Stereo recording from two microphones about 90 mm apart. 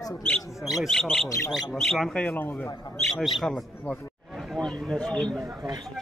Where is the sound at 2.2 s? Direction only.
20° left (ahead or behind).